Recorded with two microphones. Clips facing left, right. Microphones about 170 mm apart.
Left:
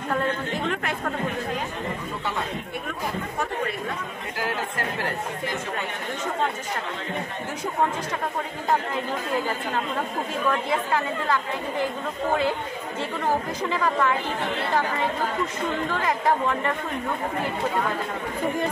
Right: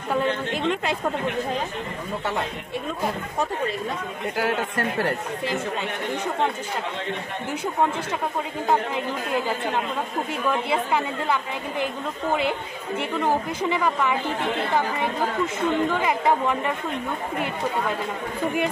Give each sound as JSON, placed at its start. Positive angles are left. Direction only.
{"t": 0.6, "sound": "speech", "side_deg": -20}
{"t": 10.5, "sound": "speech", "side_deg": -15}
{"t": 13.6, "sound": "speech", "side_deg": -15}
{"t": 16.0, "sound": "speech", "side_deg": -10}